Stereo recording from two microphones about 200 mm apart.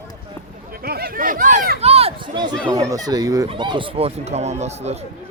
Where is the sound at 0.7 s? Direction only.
50° right (ahead or behind); by 5.0 s 30° right (ahead or behind).